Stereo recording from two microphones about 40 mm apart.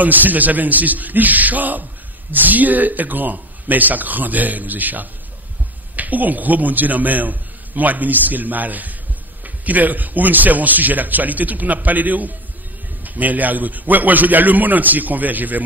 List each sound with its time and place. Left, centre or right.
0.0 s a man's voice: right